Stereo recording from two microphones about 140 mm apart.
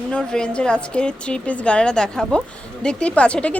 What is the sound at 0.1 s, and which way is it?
A woman's voice, 5° left (ahead or behind).